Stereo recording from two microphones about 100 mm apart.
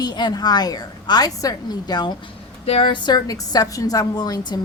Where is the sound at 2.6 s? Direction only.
70° left (ahead or behind).